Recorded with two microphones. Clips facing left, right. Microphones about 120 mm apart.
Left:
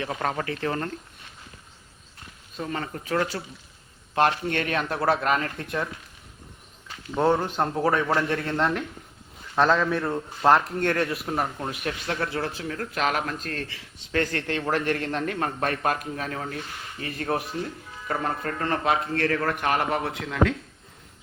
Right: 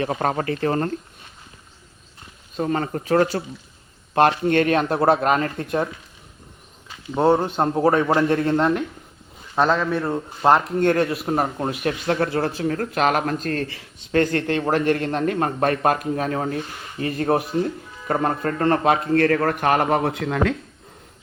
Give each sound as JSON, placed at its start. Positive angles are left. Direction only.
{"t": 0.1, "sound": "a man's voice", "side_deg": -35}
{"t": 2.6, "sound": "a man's voice", "side_deg": -35}
{"t": 6.8, "sound": "a sound", "side_deg": -15}
{"t": 7.4, "sound": "a man's voice", "side_deg": -25}
{"t": 9.6, "sound": "a man's voice", "side_deg": -5}
{"t": 10.0, "sound": "speech", "side_deg": -15}
{"t": 11.1, "sound": "a man's voice", "side_deg": -30}